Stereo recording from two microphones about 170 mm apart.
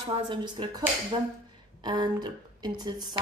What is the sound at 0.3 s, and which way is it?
Speech, 25° right (ahead or behind).